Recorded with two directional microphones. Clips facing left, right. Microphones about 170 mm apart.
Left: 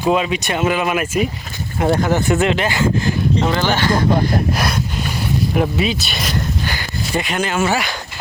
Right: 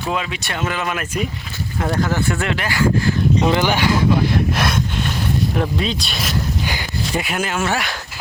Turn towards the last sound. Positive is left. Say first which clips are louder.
# left 3 dB
turn(degrees=0)  # may be behind; listen again after turning